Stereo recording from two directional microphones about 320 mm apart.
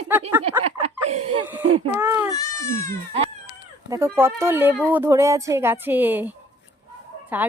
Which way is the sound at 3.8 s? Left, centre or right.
Centre.